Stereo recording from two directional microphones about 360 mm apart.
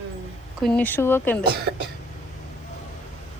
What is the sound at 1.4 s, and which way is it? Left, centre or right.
Speech, right.